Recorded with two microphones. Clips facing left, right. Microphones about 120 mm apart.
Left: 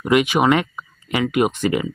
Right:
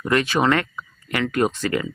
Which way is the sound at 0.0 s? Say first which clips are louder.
Left 3 dB; 15° left (ahead or behind).